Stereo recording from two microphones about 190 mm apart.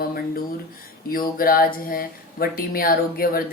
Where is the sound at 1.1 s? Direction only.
50° left (ahead or behind).